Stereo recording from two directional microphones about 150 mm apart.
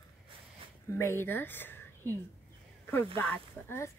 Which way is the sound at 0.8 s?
15° left (ahead or behind).